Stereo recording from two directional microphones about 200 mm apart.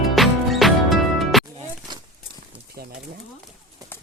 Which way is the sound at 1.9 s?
20° right (ahead or behind).